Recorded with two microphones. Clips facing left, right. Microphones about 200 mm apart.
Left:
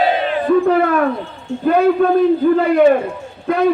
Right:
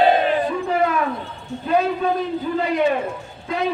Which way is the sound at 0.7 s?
60° left (ahead or behind).